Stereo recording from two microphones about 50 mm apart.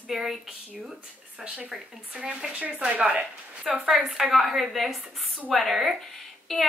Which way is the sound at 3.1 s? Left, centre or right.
Right.